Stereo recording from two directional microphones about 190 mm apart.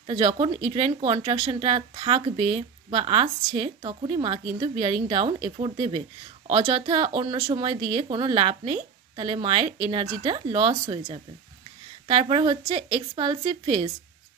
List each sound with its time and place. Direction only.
0.0 s speech: 30° right (ahead or behind)
12.1 s speech: 30° right (ahead or behind)